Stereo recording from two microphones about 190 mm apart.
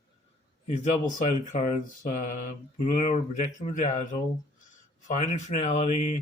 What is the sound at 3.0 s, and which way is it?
Speech, 35° left (ahead or behind).